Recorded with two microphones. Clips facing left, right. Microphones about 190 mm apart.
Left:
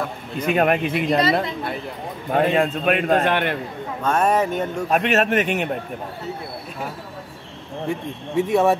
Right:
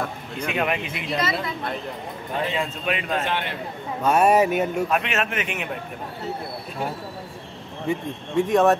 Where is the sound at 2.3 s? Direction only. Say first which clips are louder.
Left 8 dB; 55° left (ahead or behind).